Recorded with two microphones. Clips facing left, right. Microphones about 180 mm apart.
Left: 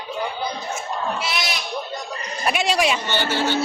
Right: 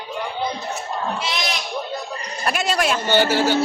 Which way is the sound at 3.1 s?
40° right (ahead or behind).